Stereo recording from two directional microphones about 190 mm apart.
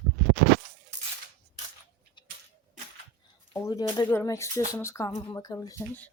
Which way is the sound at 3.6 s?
15° left (ahead or behind).